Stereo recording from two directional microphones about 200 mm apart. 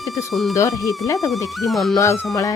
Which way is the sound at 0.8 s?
15° left (ahead or behind).